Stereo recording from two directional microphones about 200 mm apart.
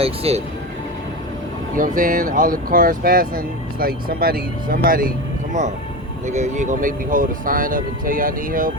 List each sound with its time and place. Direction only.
0.0 s speech: 30° right (ahead or behind)
1.7 s speech: 45° right (ahead or behind)
6.2 s speech: 35° right (ahead or behind)